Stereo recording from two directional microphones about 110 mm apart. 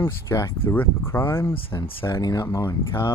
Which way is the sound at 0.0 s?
25° left (ahead or behind).